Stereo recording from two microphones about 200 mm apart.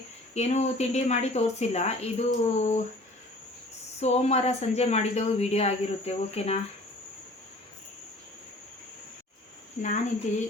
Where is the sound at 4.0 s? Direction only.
30° left (ahead or behind).